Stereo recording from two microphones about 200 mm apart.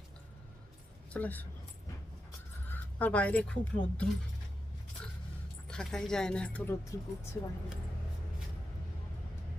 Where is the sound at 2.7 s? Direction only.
5° left (ahead or behind).